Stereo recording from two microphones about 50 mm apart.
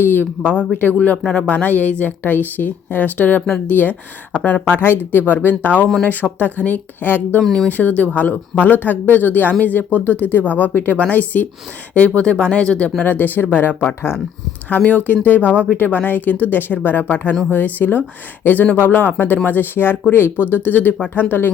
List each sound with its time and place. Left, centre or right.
0.0 s speech: left
0.4 s speech: left
1.2 s speech: centre
1.5 s speech: left
4.4 s speech: left
4.6 s speech: left
7.4 s speech: centre
7.7 s speech: left
13.1 s speech: left
14.8 s speech: left